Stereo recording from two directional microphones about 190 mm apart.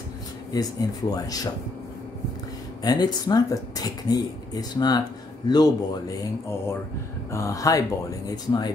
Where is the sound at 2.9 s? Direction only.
20° left (ahead or behind).